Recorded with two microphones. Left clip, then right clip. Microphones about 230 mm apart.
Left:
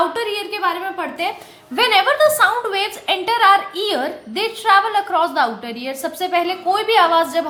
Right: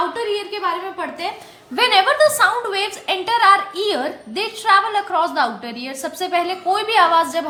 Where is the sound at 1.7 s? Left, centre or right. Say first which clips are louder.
Even; centre.